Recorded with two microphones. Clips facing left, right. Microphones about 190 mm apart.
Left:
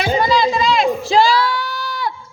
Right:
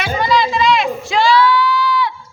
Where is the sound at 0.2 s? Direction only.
30° left (ahead or behind).